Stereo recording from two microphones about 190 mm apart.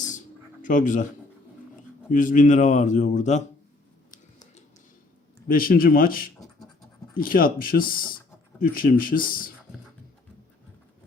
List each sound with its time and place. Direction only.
0.6 s speech: 45° left (ahead or behind)
2.0 s a man's voice: 45° left (ahead or behind)
5.5 s speech: 50° left (ahead or behind)